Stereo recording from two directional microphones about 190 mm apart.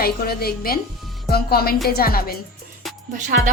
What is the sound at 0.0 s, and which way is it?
A woman's voice, 55° left (ahead or behind).